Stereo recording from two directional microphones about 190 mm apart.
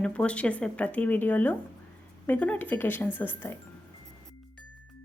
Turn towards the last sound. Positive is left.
turn(degrees=10)  # may be behind; listen again after turning